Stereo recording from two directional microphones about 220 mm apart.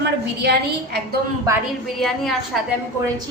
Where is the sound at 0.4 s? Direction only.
50° right (ahead or behind).